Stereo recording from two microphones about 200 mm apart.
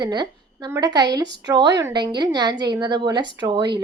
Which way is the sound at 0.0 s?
20° right (ahead or behind).